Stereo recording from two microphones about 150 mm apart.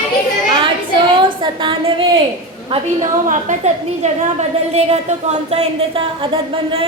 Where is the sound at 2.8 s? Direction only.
55° right (ahead or behind); by 6.8 s 35° right (ahead or behind).